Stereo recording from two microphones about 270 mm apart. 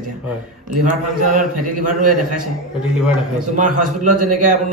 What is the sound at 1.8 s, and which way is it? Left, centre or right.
Speech, right.